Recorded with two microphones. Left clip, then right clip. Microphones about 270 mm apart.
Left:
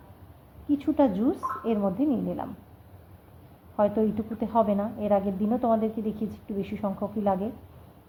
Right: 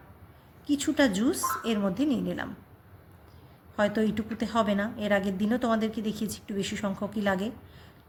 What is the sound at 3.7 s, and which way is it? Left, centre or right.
A woman's voice, right.